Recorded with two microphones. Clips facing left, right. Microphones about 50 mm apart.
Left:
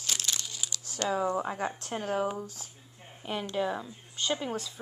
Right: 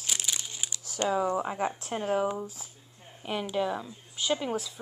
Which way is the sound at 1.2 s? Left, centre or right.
Centre.